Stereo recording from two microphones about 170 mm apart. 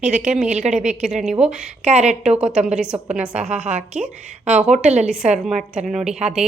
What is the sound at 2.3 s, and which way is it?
Speech, 5° right (ahead or behind).